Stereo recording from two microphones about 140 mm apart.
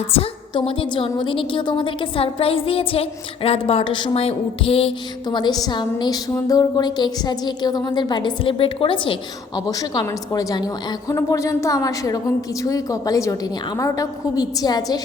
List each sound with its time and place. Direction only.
0.1 s a woman's voice: 45° left (ahead or behind)
9.6 s a woman's voice: 25° left (ahead or behind)